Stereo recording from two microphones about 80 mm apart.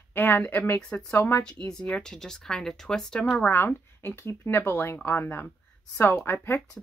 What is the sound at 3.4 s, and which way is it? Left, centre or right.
Speech, left.